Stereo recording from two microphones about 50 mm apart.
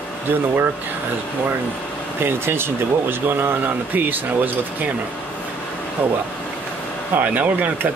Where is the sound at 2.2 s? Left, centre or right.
Right.